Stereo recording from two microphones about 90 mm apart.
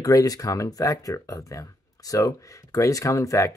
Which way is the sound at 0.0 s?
45° left (ahead or behind).